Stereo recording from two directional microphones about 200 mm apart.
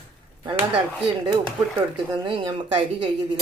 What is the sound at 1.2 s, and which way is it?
Speech, 20° right (ahead or behind).